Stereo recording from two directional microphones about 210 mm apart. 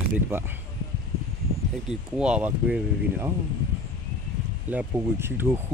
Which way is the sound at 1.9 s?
5° right (ahead or behind).